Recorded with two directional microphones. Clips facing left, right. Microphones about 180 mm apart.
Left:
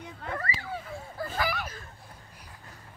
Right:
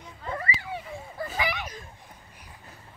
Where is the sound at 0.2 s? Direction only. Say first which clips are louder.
Right 2 dB; 65° left (ahead or behind).